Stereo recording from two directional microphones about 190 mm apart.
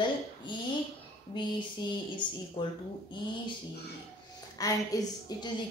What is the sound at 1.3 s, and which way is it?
A woman's voice, 25° left (ahead or behind).